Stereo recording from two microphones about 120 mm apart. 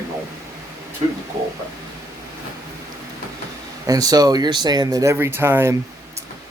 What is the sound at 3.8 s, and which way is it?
Speech, 30° right (ahead or behind).